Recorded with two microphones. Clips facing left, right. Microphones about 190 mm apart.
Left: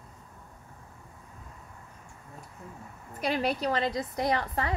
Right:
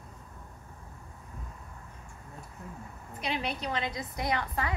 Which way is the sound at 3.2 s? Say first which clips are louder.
Left 5 dB; 45° left (ahead or behind).